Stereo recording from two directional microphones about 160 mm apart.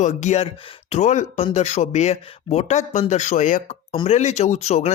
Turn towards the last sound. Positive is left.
turn(degrees=40)  # may be behind; listen again after turning